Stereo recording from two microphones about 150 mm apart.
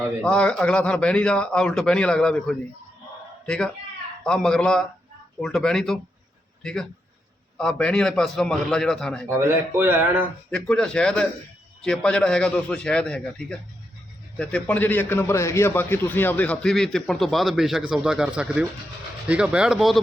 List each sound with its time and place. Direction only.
0.2 s a man's voice: 5° left (ahead or behind)
9.4 s speech: 15° right (ahead or behind)
10.5 s a man's voice: 5° left (ahead or behind)